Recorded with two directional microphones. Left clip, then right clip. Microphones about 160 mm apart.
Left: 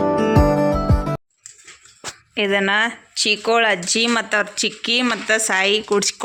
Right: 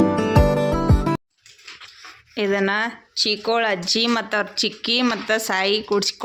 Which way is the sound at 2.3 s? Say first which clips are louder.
Left 3 dB; centre (ahead or behind).